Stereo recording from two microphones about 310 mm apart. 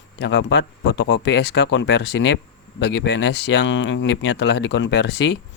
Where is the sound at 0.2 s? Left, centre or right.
Left.